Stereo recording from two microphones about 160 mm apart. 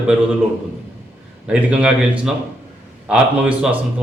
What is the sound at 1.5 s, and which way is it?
A man's voice, 5° right (ahead or behind).